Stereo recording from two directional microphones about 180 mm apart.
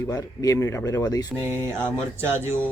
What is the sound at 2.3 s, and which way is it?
Speech, 15° right (ahead or behind).